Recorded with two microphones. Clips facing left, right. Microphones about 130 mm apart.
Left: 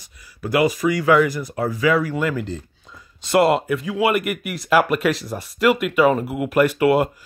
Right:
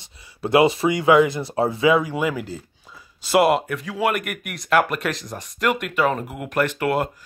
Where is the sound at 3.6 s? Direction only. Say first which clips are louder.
Left 3 dB; centre (ahead or behind).